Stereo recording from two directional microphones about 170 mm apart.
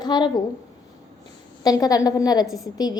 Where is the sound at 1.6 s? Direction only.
20° left (ahead or behind).